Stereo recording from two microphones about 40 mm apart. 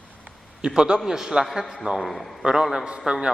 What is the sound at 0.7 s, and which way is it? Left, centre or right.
Speech, centre.